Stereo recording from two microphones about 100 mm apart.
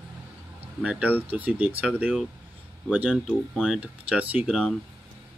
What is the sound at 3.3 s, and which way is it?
Speech, 10° right (ahead or behind).